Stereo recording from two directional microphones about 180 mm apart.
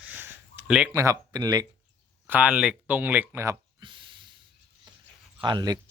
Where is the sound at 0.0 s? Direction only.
10° right (ahead or behind).